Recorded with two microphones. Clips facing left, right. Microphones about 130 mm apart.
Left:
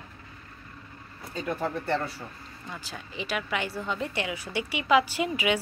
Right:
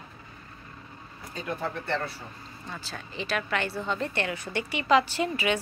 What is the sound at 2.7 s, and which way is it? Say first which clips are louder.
A woman's voice: even; 15° left (ahead or behind).